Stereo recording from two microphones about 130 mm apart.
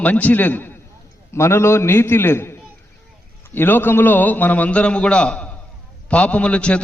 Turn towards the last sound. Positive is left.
turn(degrees=10)  # may be behind; listen again after turning